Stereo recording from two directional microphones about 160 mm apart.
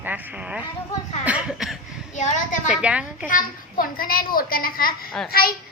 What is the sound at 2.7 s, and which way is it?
Speech, 5° right (ahead or behind).